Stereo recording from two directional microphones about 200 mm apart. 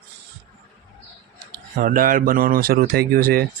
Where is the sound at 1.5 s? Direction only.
45° right (ahead or behind).